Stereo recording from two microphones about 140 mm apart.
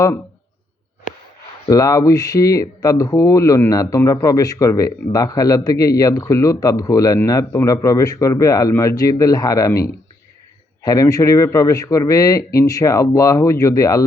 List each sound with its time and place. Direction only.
1.6 s speech: 25° left (ahead or behind)